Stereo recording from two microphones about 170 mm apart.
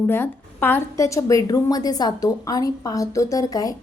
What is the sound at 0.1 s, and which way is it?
A woman's voice, 10° left (ahead or behind).